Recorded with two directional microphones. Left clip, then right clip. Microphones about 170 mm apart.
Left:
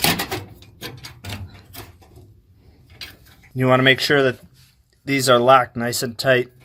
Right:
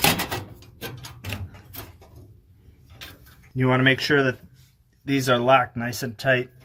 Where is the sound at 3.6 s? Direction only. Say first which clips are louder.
Left 5 dB; 50° left (ahead or behind).